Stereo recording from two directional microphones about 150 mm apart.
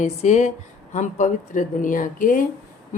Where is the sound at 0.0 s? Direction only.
50° left (ahead or behind).